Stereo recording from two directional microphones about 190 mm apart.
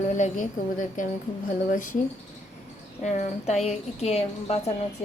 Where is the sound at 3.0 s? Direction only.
40° left (ahead or behind).